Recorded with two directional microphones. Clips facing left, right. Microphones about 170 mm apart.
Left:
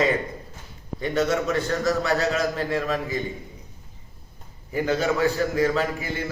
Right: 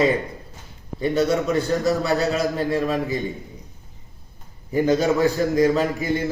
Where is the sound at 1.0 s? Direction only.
15° right (ahead or behind).